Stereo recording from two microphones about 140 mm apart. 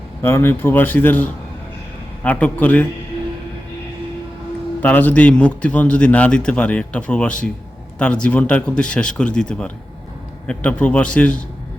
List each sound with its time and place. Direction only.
0.2 s a man's voice: 15° left (ahead or behind)
4.8 s a man's voice: 10° left (ahead or behind)